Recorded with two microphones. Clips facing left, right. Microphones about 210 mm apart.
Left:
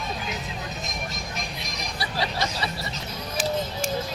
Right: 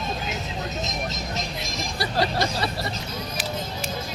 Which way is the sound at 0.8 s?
20° right (ahead or behind).